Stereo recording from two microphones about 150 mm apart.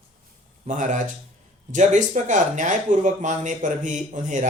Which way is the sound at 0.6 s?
55° right (ahead or behind).